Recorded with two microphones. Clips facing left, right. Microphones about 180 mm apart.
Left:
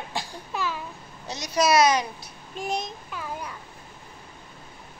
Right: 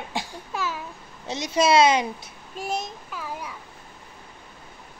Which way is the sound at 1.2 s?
25° right (ahead or behind).